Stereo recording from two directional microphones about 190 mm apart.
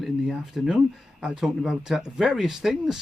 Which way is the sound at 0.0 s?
Centre (ahead or behind).